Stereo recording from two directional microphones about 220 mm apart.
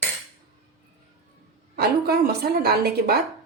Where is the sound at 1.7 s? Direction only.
45° right (ahead or behind).